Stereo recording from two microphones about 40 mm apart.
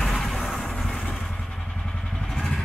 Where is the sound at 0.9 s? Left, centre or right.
Left.